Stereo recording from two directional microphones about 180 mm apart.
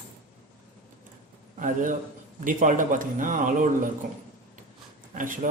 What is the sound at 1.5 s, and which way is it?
A man's voice, 45° right (ahead or behind).